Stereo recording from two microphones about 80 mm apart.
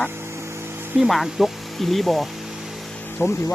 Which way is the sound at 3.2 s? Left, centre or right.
Left.